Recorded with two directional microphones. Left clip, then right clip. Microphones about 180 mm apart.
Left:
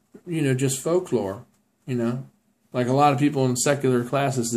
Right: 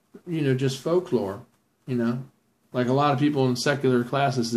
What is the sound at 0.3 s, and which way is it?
Speech, 20° left (ahead or behind).